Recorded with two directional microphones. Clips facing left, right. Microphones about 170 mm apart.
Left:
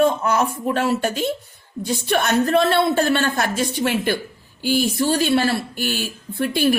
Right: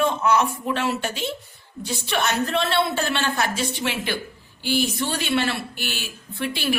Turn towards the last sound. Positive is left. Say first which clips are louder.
# left 8 dB
turn(degrees=45)  # may be behind; listen again after turning